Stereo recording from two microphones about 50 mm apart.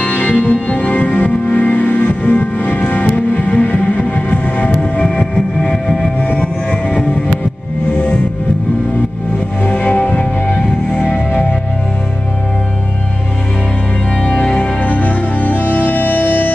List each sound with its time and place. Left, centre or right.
0.0 s music: left
5.3 s music: centre
6.2 s music: left
9.7 s music: left
14.2 s music: left